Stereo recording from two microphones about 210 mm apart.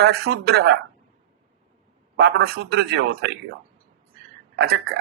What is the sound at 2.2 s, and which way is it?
Speech, 50° right (ahead or behind).